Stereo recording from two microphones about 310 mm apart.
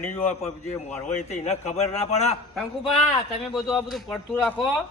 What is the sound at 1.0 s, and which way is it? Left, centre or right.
Speech, left.